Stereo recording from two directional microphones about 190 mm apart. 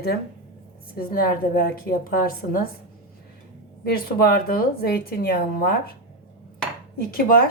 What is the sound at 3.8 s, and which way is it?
Speech, 55° left (ahead or behind).